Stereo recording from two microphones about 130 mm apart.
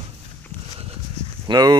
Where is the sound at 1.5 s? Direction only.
30° right (ahead or behind).